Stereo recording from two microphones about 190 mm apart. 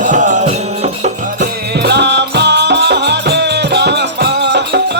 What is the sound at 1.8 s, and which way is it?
Music, 65° right (ahead or behind).